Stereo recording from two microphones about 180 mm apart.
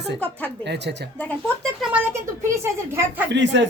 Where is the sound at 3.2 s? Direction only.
80° right.